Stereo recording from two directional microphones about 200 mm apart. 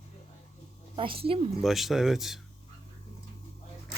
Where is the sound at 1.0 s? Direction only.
25° right (ahead or behind).